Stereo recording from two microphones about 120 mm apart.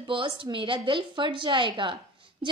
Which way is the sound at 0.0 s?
45° right (ahead or behind).